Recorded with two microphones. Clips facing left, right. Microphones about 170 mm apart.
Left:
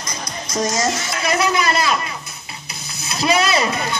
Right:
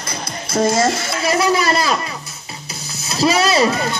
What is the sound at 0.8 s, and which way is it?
A man's voice, 30° right (ahead or behind).